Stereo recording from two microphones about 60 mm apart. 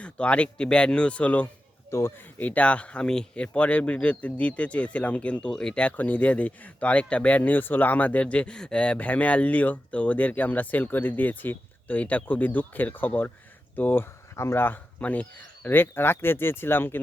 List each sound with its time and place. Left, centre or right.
0.0 s speech: centre
1.9 s speech: left
2.4 s speech: left
14.3 s speech: left
15.0 s speech: left